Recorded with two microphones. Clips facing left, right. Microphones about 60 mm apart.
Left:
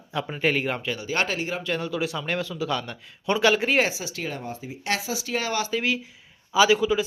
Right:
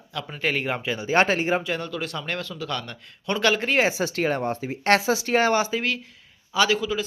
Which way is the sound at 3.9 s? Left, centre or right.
Right.